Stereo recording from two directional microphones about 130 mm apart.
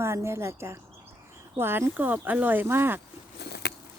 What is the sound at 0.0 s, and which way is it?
Speech, 20° right (ahead or behind).